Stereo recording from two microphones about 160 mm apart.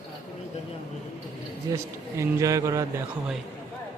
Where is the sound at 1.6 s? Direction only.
20° right (ahead or behind).